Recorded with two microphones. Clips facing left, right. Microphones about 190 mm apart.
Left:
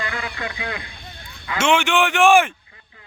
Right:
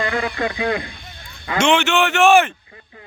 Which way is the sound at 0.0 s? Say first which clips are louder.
Right 7 dB; 30° right (ahead or behind).